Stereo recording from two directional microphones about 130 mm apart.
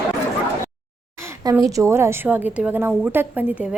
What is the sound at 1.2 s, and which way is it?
A woman's voice, 20° right (ahead or behind).